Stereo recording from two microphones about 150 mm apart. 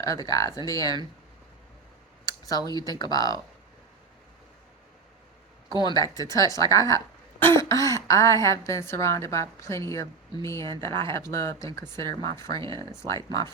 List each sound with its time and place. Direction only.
0.0 s a woman's voice: 25° left (ahead or behind)
2.2 s speech: 25° left (ahead or behind)
5.7 s a woman's voice: 25° left (ahead or behind)